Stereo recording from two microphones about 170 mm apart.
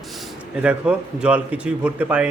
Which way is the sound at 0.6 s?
5° right (ahead or behind).